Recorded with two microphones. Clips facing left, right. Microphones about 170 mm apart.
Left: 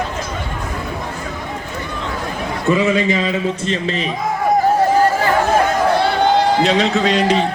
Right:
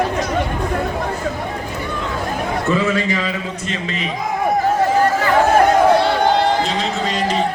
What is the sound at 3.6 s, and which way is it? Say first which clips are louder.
Speech: left 5 dB; 30° left (ahead or behind).